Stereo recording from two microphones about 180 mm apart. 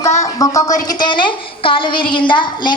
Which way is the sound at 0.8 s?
25° left (ahead or behind).